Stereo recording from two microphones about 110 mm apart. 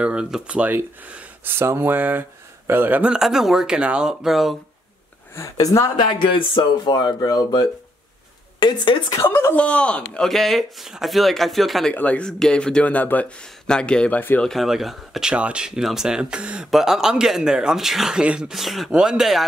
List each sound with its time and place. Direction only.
0.0 s speech: 10° right (ahead or behind)
5.3 s speech: 30° left (ahead or behind); by 9.0 s 45° left (ahead or behind)
9.2 s speech: 20° left (ahead or behind); by 11.9 s centre (ahead or behind)
11.9 s speech: 15° left (ahead or behind)
14.4 s speech: centre (ahead or behind)